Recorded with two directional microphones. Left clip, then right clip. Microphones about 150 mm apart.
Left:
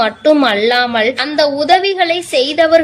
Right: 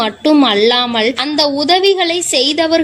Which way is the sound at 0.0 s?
40° right (ahead or behind).